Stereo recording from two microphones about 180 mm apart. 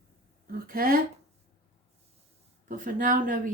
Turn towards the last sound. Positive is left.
turn(degrees=-50)  # may be behind; listen again after turning